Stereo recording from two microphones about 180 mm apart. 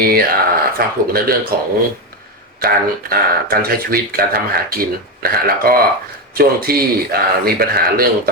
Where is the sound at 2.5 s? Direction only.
55° right (ahead or behind).